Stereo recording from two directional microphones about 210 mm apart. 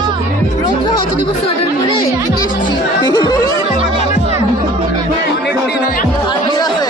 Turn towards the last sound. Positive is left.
turn(degrees=20)  # may be behind; listen again after turning